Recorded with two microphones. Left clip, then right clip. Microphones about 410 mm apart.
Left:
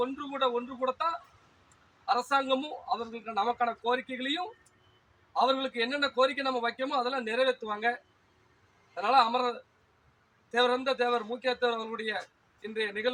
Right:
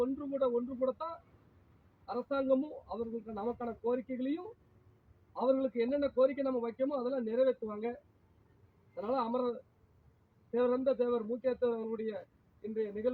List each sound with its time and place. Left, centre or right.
0.0 s speech: right
2.0 s a man's voice: right
5.3 s a man's voice: right
9.0 s a man's voice: right